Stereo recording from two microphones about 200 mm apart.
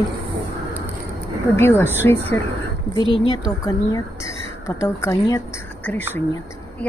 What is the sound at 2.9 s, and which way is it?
Speech, 25° left (ahead or behind).